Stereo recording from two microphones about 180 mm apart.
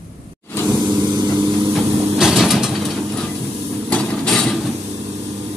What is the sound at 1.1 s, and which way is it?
Vehicle, 25° right (ahead or behind).